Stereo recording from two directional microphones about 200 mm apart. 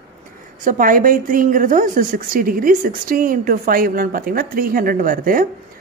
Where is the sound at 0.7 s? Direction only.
45° right (ahead or behind).